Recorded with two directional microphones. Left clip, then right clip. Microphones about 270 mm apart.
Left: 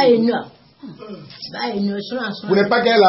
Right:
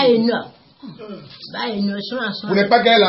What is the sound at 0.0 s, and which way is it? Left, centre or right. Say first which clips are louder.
Speech: left 1 dB; centre.